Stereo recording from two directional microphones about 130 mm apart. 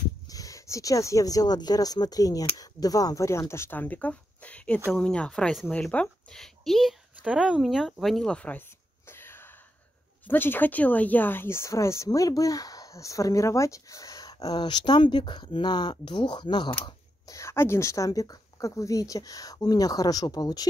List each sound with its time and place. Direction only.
0.3 s a woman's voice: 25° left (ahead or behind)
16.8 s speech: 25° left (ahead or behind)